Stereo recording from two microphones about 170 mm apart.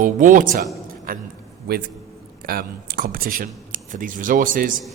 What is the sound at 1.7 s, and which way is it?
A man's voice, 70° right (ahead or behind).